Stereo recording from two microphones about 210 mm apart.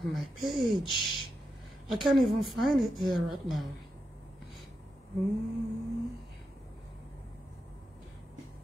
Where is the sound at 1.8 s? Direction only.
Centre (ahead or behind).